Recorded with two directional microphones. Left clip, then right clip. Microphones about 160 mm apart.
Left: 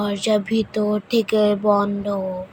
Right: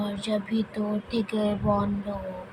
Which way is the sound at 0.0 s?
40° left (ahead or behind).